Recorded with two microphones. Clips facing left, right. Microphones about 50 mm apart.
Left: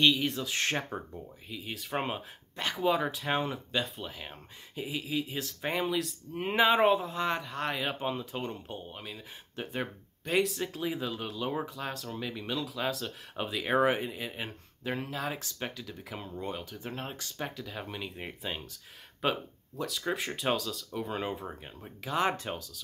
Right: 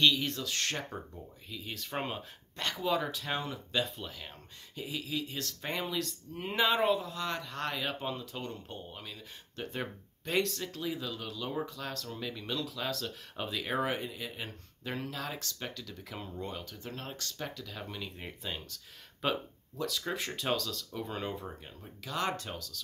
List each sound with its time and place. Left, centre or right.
0.0 s speech: centre
0.4 s speech: left
1.5 s speech: centre
3.3 s speech: left
3.7 s speech: centre
4.1 s speech: centre
6.3 s speech: left
7.4 s speech: centre
8.6 s speech: centre
10.6 s speech: left
13.7 s speech: left
19.2 s speech: centre